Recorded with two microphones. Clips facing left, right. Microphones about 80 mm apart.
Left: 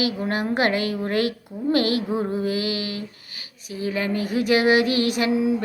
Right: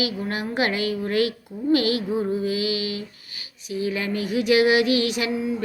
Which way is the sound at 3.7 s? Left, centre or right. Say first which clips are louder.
Even; left.